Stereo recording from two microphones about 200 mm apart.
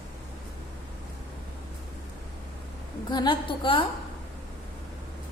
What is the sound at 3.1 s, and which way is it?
Speech, 20° left (ahead or behind).